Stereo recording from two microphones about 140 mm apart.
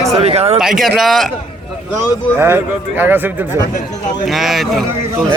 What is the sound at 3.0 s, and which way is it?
Speech, 15° right (ahead or behind).